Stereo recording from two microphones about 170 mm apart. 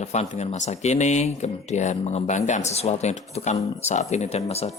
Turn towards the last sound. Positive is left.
turn(degrees=35)  # may be behind; listen again after turning